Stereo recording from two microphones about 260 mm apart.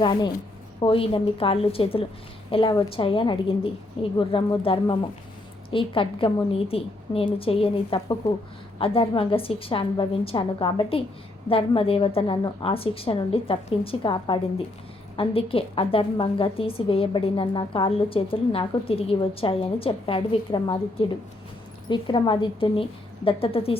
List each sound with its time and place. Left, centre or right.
0.0 s a woman's voice: centre
21.8 s a woman's voice: centre